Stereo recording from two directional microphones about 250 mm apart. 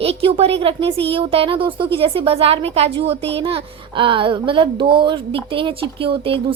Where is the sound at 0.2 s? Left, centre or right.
Right.